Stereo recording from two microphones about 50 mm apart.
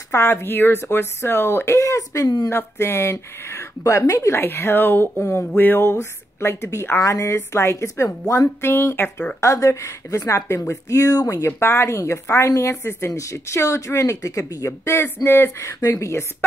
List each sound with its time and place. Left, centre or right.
0.1 s a woman's voice: left
1.7 s speech: left
2.5 s a woman's voice: left
4.4 s speech: left
5.9 s a woman's voice: left
9.4 s speech: left
11.6 s a woman's voice: left
14.9 s speech: left
15.6 s speech: left